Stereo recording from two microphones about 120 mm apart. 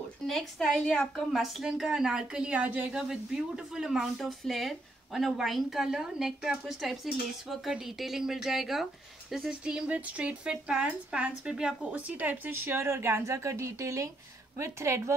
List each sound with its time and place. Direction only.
0.3 s a woman's voice: centre (ahead or behind); by 15.1 s 20° right (ahead or behind)